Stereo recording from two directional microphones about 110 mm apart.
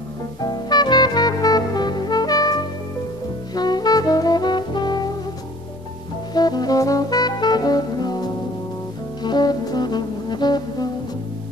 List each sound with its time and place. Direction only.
0.4 s music: 40° left (ahead or behind)
3.5 s brass instrument: 40° left (ahead or behind)
6.3 s music: 40° left (ahead or behind)